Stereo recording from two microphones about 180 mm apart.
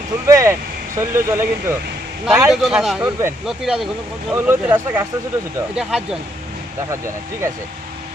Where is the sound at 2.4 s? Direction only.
Centre (ahead or behind).